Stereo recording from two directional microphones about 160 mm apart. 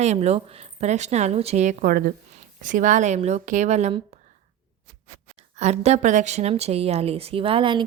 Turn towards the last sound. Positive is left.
turn(degrees=-30)  # may be behind; listen again after turning